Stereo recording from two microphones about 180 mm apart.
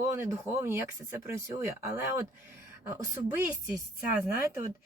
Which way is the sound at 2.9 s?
15° right (ahead or behind).